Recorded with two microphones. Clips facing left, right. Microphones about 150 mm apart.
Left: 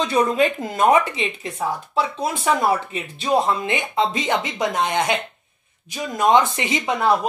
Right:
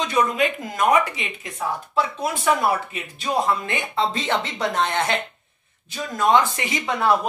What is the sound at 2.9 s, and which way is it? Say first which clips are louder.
Speech: left 5 dB; 25° left (ahead or behind).